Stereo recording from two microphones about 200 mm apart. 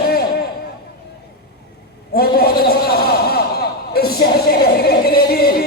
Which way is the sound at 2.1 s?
50° left (ahead or behind).